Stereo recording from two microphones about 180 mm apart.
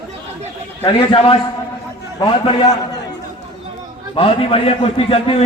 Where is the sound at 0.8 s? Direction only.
30° left (ahead or behind).